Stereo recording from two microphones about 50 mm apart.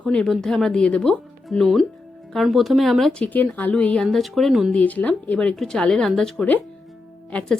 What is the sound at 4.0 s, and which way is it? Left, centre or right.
Speech, centre.